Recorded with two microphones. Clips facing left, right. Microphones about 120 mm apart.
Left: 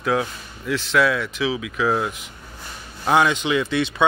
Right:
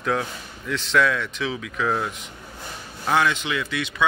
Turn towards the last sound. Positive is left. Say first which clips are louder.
# left 6 dB
turn(degrees=25)  # may be behind; listen again after turning